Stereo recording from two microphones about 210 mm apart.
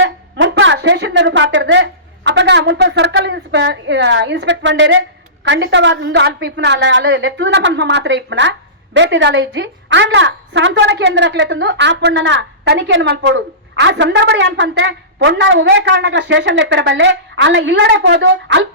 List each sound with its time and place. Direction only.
0.0 s a woman's voice: 60° right (ahead or behind)